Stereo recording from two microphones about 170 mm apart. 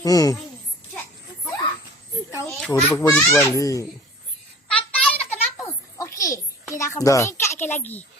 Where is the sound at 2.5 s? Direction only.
5° left (ahead or behind).